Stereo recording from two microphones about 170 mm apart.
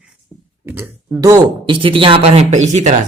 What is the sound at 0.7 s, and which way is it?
Speech, 10° right (ahead or behind).